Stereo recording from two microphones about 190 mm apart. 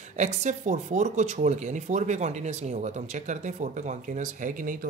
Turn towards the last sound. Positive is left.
turn(degrees=-45)  # may be behind; listen again after turning